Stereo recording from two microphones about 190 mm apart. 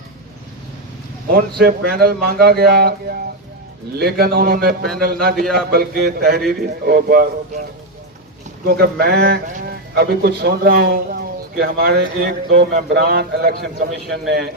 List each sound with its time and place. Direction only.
1.3 s speech: 55° right (ahead or behind)